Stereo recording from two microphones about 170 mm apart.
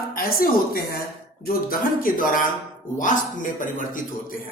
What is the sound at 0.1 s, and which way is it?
Speech, 60° left (ahead or behind).